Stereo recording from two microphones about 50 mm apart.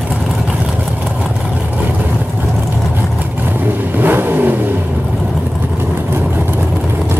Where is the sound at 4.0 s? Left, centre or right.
Right.